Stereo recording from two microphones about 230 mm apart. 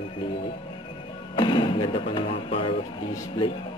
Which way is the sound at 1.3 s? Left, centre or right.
Left.